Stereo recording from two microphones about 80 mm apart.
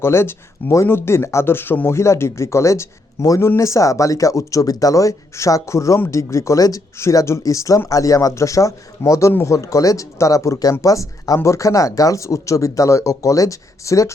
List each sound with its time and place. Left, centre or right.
0.0 s speech: left